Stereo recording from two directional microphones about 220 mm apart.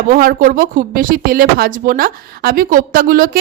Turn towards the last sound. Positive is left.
turn(degrees=-40)  # may be behind; listen again after turning